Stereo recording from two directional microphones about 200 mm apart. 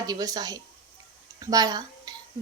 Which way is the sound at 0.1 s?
20° right (ahead or behind).